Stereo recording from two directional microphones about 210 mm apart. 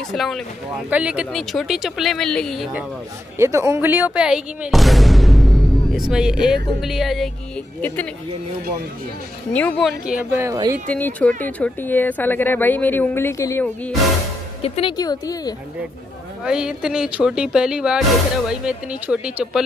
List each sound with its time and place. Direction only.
0.1 s speech: centre (ahead or behind)
3.3 s speech: 15° right (ahead or behind); by 8.1 s 5° left (ahead or behind)
9.5 s speech: 5° left (ahead or behind); by 10.8 s 15° right (ahead or behind)
10.9 s speech: 5° left (ahead or behind)
14.6 s speech: 25° left (ahead or behind)
16.4 s speech: 5° right (ahead or behind)